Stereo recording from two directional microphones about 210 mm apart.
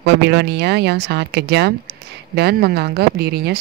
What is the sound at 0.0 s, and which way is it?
Speech, 50° right (ahead or behind).